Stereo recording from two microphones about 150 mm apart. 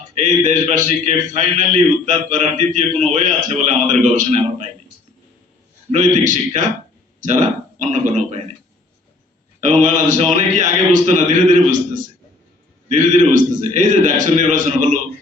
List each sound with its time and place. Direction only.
0.1 s a man's voice: 55° right (ahead or behind)
5.9 s a man's voice: 55° right (ahead or behind)
9.6 s a man's voice: 55° right (ahead or behind)